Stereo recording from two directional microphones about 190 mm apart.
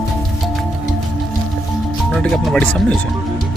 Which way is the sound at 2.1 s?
Centre (ahead or behind).